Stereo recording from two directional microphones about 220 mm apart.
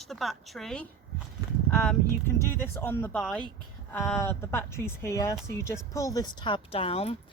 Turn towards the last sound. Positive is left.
turn(degrees=25)  # may be behind; listen again after turning